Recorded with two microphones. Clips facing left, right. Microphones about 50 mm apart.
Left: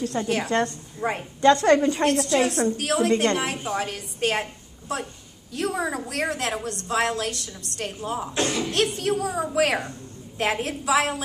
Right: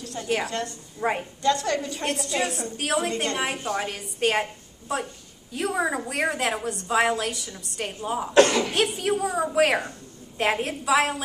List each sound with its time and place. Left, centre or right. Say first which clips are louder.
0.0 s a woman's voice: left 2 dB; left
1.0 s a woman's voice: right 1 dB; centre
1.4 s a woman's voice: left 8 dB; left
2.0 s a woman's voice: left 2 dB; centre
8.4 s speech: right 9 dB; right
8.7 s a woman's voice: even; centre